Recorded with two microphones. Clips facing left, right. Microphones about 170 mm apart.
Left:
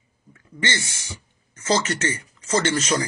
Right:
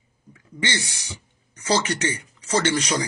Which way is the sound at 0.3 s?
15° right (ahead or behind).